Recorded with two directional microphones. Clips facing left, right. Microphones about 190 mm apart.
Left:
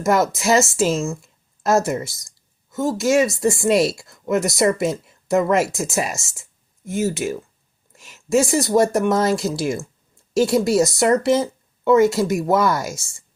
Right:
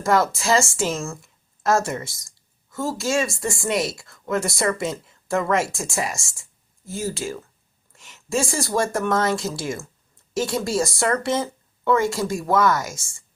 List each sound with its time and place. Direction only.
0.0 s speech: 20° left (ahead or behind)
2.6 s speech: 20° left (ahead or behind)
7.9 s a sound: 20° left (ahead or behind)
8.4 s speech: 20° left (ahead or behind)